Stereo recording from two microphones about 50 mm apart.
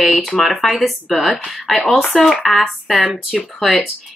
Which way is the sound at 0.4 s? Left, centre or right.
Centre.